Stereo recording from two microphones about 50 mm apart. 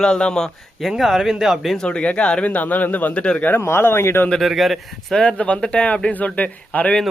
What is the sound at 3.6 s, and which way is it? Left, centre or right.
Speech, left.